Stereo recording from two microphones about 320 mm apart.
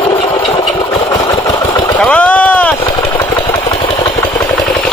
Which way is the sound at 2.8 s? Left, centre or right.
Centre.